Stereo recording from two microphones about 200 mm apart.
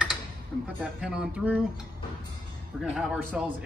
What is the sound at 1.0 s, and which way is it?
Speech, 5° right (ahead or behind).